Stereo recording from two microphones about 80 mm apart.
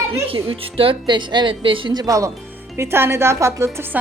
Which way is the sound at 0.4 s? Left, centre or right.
Right.